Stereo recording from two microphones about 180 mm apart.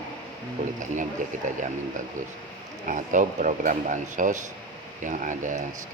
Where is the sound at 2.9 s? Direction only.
45° right (ahead or behind).